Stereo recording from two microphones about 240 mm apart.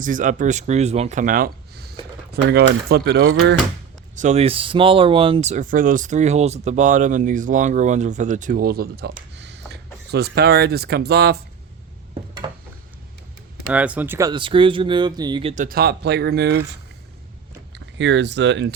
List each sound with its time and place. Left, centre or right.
0.0 s speech: right
4.1 s speech: right
9.3 s a sound: right
12.4 s a sound: centre
13.7 s speech: centre; by 16.6 s right
17.9 s speech: right